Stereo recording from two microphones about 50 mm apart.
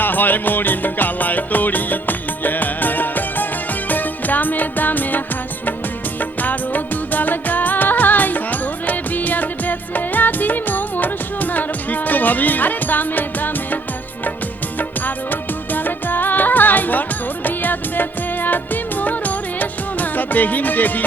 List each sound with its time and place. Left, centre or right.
0.0 s music: left
6.1 s music of bollywood: left
14.8 s music: left